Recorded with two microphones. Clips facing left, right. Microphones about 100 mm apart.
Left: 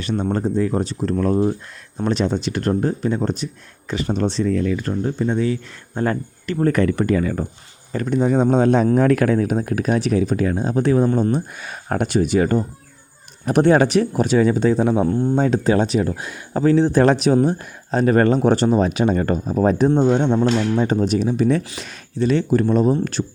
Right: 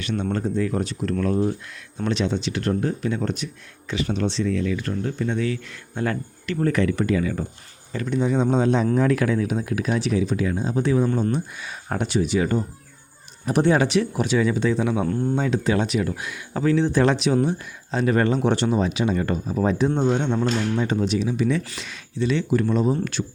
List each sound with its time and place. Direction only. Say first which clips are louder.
0.0 s speech: left 4 dB; 35° left (ahead or behind)